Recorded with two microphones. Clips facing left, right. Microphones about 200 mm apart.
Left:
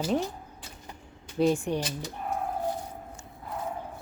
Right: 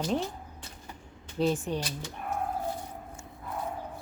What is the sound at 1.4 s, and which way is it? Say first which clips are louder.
Speech: left 3 dB; 10° left (ahead or behind).